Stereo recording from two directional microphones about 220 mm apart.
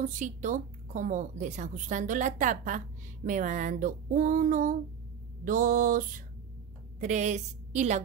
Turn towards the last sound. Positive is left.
turn(degrees=-30)  # may be behind; listen again after turning